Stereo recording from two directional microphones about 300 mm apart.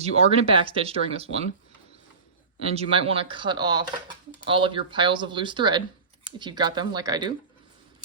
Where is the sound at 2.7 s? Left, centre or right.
Centre.